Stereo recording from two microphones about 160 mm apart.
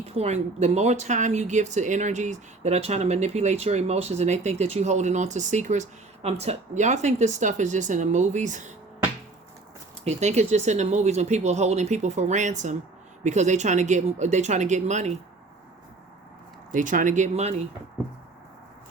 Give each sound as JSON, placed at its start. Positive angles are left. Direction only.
{"t": 0.0, "sound": "speech", "side_deg": -40}
{"t": 10.0, "sound": "speech", "side_deg": -45}
{"t": 16.7, "sound": "speech", "side_deg": -55}